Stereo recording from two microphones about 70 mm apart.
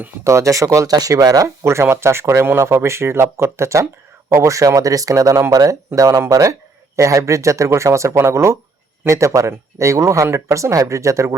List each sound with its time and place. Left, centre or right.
0.3 s speech: right
0.9 s speech: right
1.6 s speech: right